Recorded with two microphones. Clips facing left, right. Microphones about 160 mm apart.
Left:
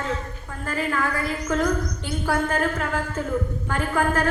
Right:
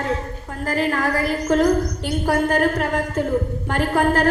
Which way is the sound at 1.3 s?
35° right (ahead or behind).